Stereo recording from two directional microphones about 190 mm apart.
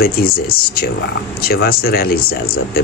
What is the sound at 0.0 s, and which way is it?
Speech, 50° left (ahead or behind).